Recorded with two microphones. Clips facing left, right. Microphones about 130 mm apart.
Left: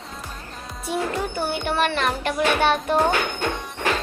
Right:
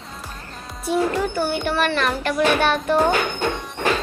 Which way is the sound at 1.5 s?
20° left (ahead or behind).